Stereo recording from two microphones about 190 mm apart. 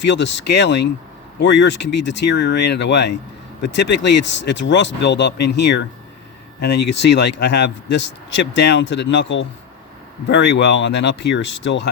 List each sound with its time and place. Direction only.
0.0 s speech: 70° left (ahead or behind)